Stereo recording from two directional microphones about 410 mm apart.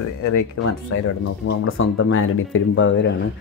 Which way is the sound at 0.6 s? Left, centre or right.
Left.